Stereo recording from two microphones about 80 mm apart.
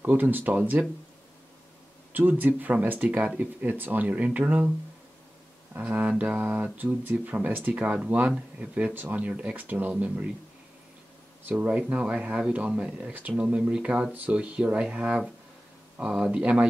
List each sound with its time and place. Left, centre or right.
0.0 s speech: right
2.1 s speech: right
5.8 s speech: centre
11.9 s speech: centre